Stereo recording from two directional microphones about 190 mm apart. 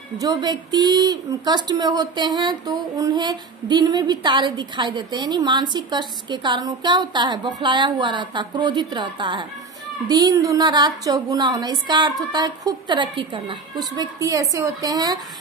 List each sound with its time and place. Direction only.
0.2 s a woman's voice: 20° right (ahead or behind)